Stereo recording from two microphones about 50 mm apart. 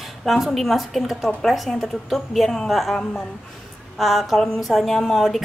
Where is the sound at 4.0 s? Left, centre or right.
Centre.